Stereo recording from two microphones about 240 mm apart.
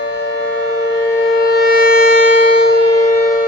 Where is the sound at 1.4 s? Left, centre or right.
Left.